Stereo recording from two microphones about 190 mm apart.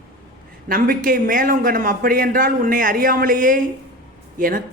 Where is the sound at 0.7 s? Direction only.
45° right (ahead or behind).